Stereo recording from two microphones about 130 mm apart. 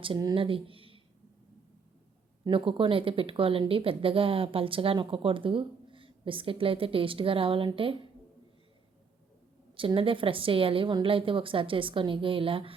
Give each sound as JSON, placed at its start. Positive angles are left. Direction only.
{"t": 0.3, "sound": "speech", "side_deg": -45}
{"t": 2.5, "sound": "speech", "side_deg": -45}
{"t": 9.7, "sound": "speech", "side_deg": -45}